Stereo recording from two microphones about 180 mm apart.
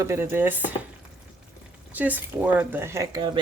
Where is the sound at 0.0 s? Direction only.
15° right (ahead or behind).